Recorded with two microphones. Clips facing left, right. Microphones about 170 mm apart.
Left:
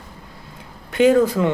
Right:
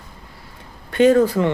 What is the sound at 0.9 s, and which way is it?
Speech, 10° left (ahead or behind).